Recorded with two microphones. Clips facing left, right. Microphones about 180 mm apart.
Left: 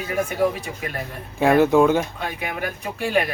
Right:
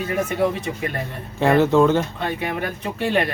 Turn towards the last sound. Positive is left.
turn(degrees=5)  # may be behind; listen again after turning